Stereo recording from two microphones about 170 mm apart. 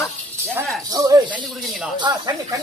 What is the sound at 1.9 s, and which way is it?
Speech, 25° right (ahead or behind).